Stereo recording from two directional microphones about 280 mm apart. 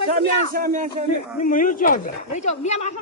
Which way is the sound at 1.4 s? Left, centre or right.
Left.